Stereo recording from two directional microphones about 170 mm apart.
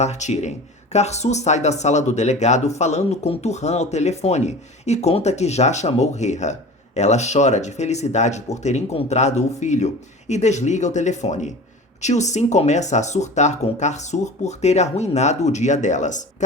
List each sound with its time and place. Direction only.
0.0 s speech: 40° left (ahead or behind)